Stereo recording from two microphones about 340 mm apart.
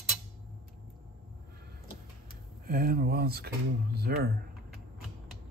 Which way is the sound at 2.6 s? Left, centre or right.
Right.